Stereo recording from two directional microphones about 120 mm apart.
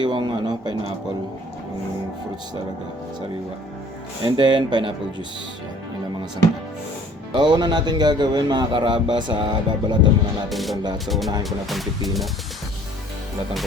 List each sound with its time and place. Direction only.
0.0 s a sound: 40° right (ahead or behind)
4.2 s a man's voice: 40° right (ahead or behind)
7.3 s a man's voice: 40° right (ahead or behind)
10.5 s music: centre (ahead or behind)